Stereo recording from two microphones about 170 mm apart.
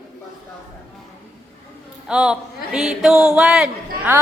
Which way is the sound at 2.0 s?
5° right (ahead or behind).